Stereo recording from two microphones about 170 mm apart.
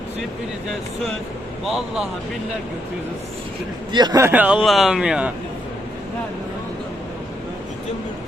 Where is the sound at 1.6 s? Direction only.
Centre (ahead or behind).